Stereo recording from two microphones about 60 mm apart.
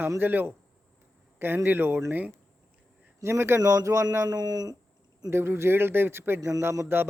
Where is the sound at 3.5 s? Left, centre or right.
Right.